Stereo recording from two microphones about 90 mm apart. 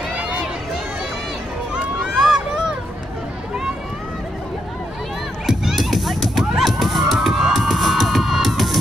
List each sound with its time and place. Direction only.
0.1 s run: 15° right (ahead or behind)
2.0 s a sound: 5° right (ahead or behind)
5.5 s music: 5° right (ahead or behind)